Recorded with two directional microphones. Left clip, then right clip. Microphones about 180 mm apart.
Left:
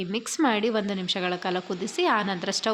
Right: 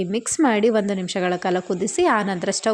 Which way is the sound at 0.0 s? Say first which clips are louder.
Right 5 dB; 30° right (ahead or behind).